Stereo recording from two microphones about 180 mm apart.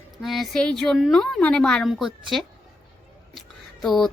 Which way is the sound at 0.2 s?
Centre (ahead or behind).